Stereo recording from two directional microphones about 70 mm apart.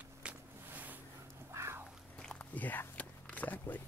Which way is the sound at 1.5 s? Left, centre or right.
Right.